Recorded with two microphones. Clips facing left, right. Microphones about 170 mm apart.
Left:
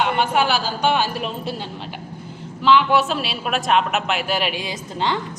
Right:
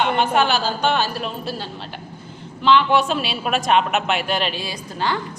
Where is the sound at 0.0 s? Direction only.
10° left (ahead or behind).